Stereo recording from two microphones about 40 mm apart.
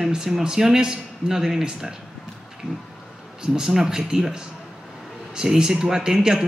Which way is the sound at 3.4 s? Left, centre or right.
Centre.